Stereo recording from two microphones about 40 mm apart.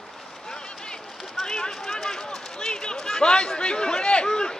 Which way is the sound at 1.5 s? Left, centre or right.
Centre.